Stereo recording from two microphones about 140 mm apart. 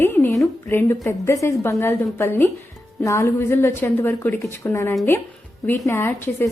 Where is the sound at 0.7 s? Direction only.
15° left (ahead or behind).